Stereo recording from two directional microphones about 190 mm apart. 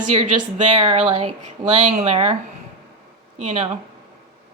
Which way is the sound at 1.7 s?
40° right (ahead or behind).